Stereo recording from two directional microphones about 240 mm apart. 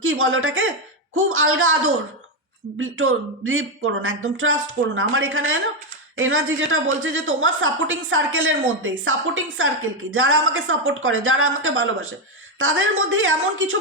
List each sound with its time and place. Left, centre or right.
0.0 s a woman's voice: right